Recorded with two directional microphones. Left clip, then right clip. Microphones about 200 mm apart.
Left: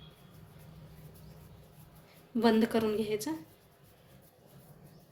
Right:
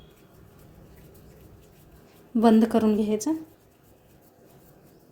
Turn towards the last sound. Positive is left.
turn(degrees=-35)  # may be behind; listen again after turning